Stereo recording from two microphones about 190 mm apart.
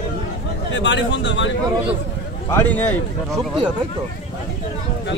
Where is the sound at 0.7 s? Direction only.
70° left (ahead or behind).